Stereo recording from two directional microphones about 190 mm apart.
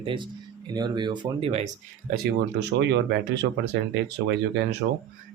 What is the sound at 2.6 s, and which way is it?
Speech, 65° right (ahead or behind).